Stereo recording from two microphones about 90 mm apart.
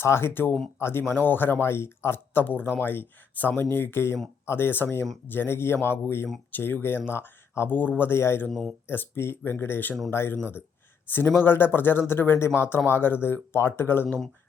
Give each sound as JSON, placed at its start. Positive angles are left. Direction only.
{"t": 0.0, "sound": "speech", "side_deg": 25}
{"t": 8.4, "sound": "speech", "side_deg": 5}
{"t": 8.9, "sound": "speech", "side_deg": 25}